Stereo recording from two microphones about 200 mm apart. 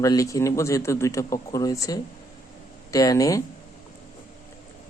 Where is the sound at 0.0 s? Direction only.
15° left (ahead or behind).